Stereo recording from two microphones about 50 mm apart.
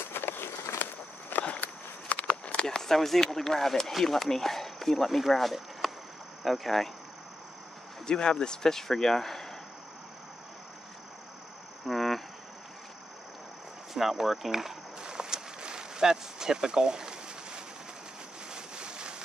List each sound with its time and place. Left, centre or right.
0.0 s a sound: left
0.8 s walk: left
1.4 s a sound: left; by 3.9 s centre
4.0 s speech: centre
8.1 s speech: centre
11.8 s insect: centre
13.9 s speech: centre
15.0 s a sound: centre
18.5 s boat: centre